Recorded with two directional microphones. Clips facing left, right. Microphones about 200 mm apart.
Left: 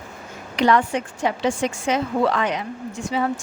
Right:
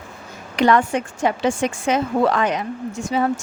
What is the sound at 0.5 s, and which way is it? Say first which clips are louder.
A woman's voice: right 2 dB; 50° right (ahead or behind).